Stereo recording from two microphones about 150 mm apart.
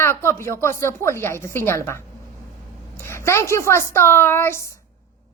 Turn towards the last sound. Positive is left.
turn(degrees=15)  # may be behind; listen again after turning